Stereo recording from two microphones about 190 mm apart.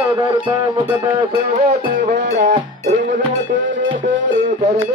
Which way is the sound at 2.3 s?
40° right (ahead or behind).